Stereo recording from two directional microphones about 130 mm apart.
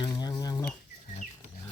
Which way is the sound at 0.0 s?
30° left (ahead or behind).